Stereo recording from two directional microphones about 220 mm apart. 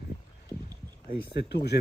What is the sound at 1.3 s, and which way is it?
Speech, 50° left (ahead or behind).